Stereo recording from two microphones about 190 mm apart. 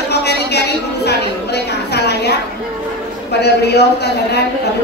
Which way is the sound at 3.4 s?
60° left (ahead or behind).